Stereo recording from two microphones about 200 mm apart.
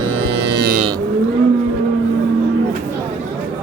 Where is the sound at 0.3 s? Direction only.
60° right (ahead or behind).